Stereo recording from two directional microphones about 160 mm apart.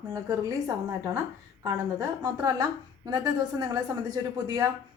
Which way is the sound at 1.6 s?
25° right (ahead or behind).